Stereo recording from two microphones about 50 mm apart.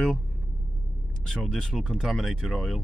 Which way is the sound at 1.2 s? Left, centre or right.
Centre.